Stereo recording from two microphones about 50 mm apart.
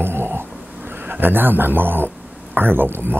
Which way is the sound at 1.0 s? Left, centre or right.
Right.